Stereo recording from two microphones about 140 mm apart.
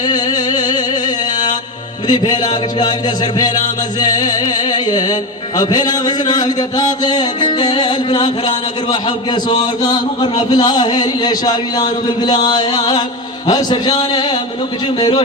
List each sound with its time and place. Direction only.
0.0 s music: 30° left (ahead or behind)
2.0 s a man's voice: 30° left (ahead or behind)
3.3 s music: 30° left (ahead or behind)
5.5 s a man's voice: 30° left (ahead or behind)
13.5 s music: 30° left (ahead or behind)
14.9 s a man's voice: 35° left (ahead or behind)